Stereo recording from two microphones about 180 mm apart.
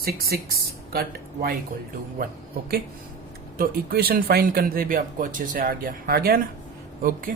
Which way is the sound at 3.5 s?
55° right (ahead or behind).